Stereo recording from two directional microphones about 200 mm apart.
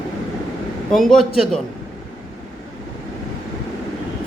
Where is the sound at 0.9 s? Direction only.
Centre (ahead or behind).